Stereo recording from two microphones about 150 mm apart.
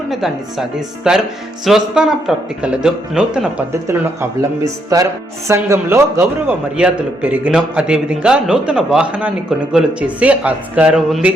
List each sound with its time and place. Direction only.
0.1 s a man's voice: centre (ahead or behind)
3.7 s a man's voice: 15° right (ahead or behind)